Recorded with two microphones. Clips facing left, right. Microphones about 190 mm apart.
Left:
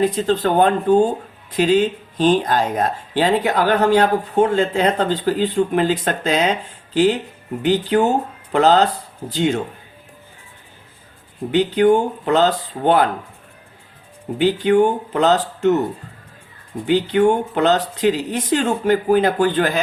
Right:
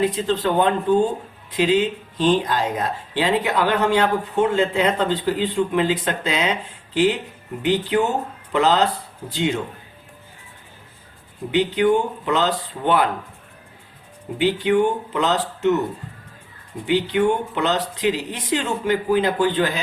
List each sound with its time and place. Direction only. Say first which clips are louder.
0.0 s a woman's voice: left 3 dB; 45° left (ahead or behind)
7.6 s a woman's voice: left 3 dB; 45° left (ahead or behind)
11.5 s a woman's voice: left 3 dB; 45° left (ahead or behind)
14.3 s a woman's voice: left 3 dB; 45° left (ahead or behind)
16.8 s a woman's voice: left 4 dB; 45° left (ahead or behind)